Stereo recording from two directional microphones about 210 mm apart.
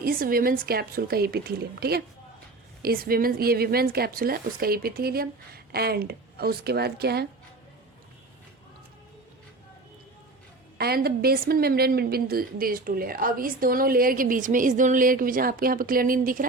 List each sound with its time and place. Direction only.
0.0 s a woman's voice: 45° right (ahead or behind)
10.8 s a woman's voice: 45° right (ahead or behind)